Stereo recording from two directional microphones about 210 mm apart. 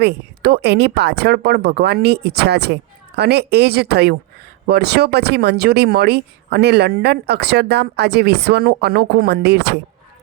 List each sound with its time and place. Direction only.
0.0 s speech: 50° right (ahead or behind)